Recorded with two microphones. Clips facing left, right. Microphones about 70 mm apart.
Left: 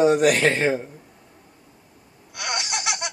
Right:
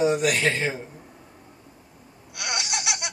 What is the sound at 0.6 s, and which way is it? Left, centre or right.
Speech, left.